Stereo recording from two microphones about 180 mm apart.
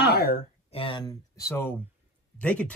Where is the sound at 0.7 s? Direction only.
30° left (ahead or behind); by 2.7 s 5° left (ahead or behind).